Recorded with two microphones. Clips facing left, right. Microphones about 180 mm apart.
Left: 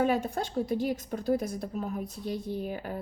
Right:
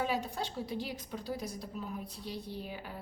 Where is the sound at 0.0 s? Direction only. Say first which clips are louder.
Left 7 dB; 50° left (ahead or behind).